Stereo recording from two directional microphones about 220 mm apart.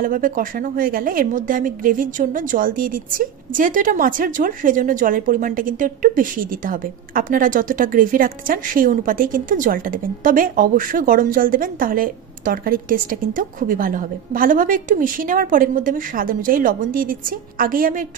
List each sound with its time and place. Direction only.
0.0 s a woman's voice: 40° right (ahead or behind)